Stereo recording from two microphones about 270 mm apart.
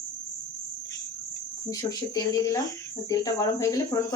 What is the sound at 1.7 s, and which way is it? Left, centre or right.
Speech, centre.